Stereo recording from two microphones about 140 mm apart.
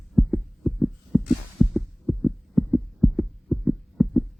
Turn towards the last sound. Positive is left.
turn(degrees=0)  # may be behind; listen again after turning